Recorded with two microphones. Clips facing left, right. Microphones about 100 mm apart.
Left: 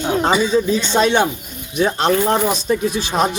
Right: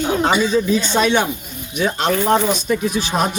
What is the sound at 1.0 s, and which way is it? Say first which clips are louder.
Speech: left 2 dB; 30° left (ahead or behind).